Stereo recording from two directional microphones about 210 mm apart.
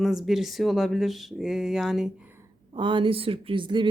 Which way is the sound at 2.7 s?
25° right (ahead or behind).